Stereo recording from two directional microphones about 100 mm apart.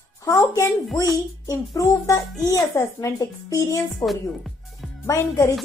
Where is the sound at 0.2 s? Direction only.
30° left (ahead or behind).